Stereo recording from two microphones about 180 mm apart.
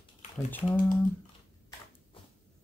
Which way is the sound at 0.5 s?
5° left (ahead or behind).